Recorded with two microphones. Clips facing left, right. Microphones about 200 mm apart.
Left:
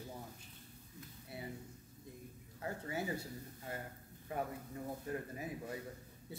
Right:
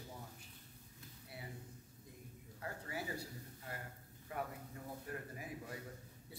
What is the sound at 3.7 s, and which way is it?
Speech, 25° left (ahead or behind).